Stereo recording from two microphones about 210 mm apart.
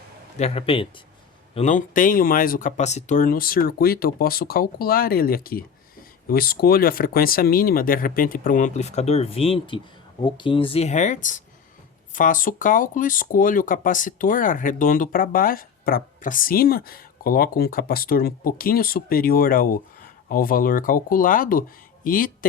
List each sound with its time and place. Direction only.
0.3 s speech: 30° left (ahead or behind)
1.5 s speech: 35° left (ahead or behind)